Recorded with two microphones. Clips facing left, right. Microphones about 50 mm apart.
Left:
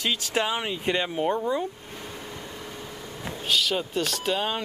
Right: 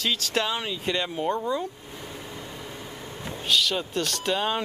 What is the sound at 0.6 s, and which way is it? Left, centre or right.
Speech, left.